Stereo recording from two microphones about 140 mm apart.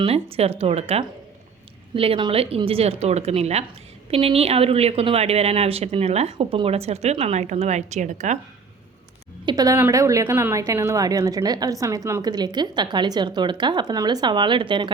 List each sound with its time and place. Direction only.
0.0 s speech: 45° right (ahead or behind)
6.3 s speech: 40° right (ahead or behind); by 8.4 s 60° right (ahead or behind)
9.5 s a woman's voice: 25° right (ahead or behind)